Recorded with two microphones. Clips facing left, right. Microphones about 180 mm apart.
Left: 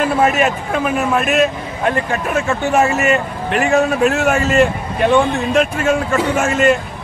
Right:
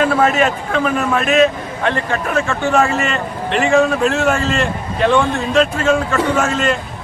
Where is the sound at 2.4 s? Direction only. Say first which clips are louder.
Left 2 dB; 15° left (ahead or behind).